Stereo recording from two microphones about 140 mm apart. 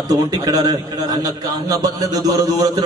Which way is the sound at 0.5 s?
25° right (ahead or behind).